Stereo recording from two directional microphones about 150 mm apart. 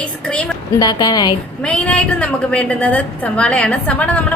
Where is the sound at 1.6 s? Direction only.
10° left (ahead or behind).